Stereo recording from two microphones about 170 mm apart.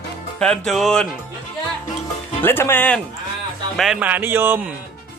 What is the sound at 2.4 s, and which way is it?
Speech, 10° left (ahead or behind).